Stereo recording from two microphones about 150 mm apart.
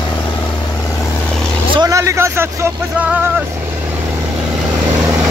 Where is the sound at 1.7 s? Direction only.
25° right (ahead or behind).